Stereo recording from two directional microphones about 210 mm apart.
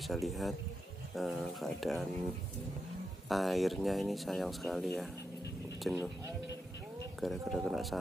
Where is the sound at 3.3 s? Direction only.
Centre (ahead or behind).